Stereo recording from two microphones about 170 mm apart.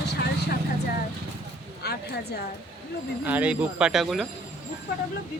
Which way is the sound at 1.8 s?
70° left (ahead or behind).